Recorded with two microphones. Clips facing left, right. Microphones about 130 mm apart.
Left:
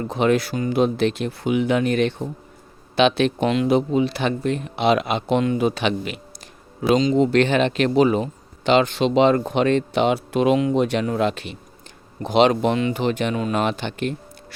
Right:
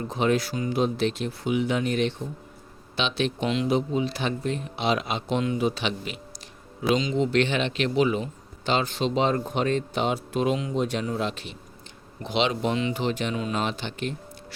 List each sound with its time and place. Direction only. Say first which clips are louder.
0.1 s speech: left 5 dB; 65° left (ahead or behind)
6.9 s speech: left 6 dB; 45° left (ahead or behind)
8.6 s speech: left 8 dB; 75° left (ahead or behind)
12.2 s speech: left 8 dB; 45° left (ahead or behind)